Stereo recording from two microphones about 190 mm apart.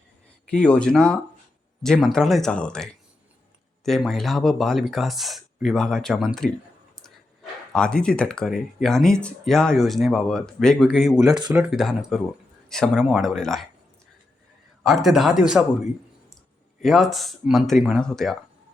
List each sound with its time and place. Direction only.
0.5 s speech: 5° left (ahead or behind)
7.7 s speech: 5° left (ahead or behind)
11.2 s speech: 20° right (ahead or behind)
11.5 s speech: centre (ahead or behind)
14.8 s speech: centre (ahead or behind)